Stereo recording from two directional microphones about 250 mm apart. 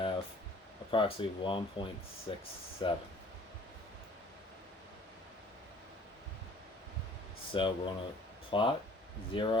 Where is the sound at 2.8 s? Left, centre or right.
Centre.